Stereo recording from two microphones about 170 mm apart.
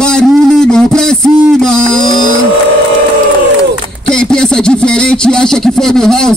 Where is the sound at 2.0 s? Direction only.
25° left (ahead or behind).